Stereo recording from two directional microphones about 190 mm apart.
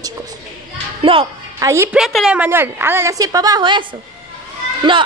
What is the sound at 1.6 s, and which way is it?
A woman's voice, 15° right (ahead or behind).